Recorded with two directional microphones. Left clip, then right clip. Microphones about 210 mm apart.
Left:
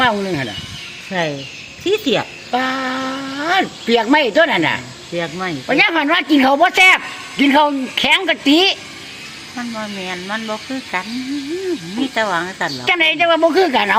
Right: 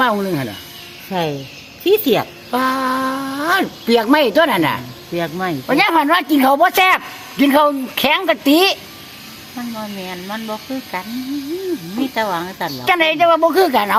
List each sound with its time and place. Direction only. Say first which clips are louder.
0.0 s speech: even; 5° right (ahead or behind)
1.8 s a woman's voice: right 2 dB; 40° right (ahead or behind)
2.5 s a man's voice: right 2 dB; 10° right (ahead or behind)
5.1 s speech: right 1 dB; 45° right (ahead or behind)
5.6 s a man's voice: even; 15° right (ahead or behind)
9.6 s speech: left 2 dB; centre (ahead or behind)
11.9 s a man's voice: left 2 dB; 10° right (ahead or behind)